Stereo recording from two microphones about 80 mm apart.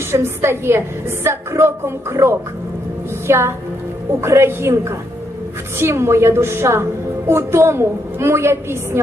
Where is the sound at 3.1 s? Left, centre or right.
Right.